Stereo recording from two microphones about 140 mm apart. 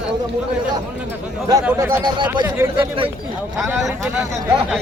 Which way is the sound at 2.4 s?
15° right (ahead or behind).